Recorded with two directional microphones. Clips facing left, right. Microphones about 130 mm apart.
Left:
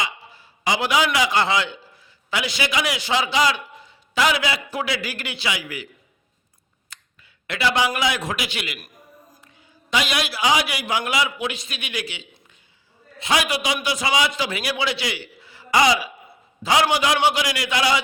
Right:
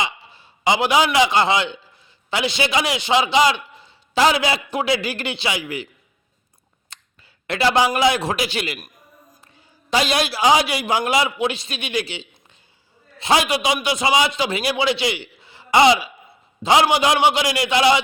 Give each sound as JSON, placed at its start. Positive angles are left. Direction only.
{"t": 0.0, "sound": "a man's voice", "side_deg": -25}
{"t": 6.9, "sound": "a sound", "side_deg": -30}
{"t": 7.4, "sound": "a man's voice", "side_deg": -35}
{"t": 9.9, "sound": "a man's voice", "side_deg": -30}